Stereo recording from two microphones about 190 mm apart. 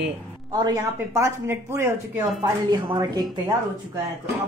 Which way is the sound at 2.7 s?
25° right (ahead or behind).